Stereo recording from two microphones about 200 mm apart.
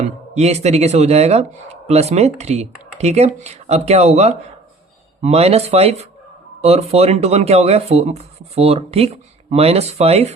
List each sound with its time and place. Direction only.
0.0 s speech: 35° right (ahead or behind)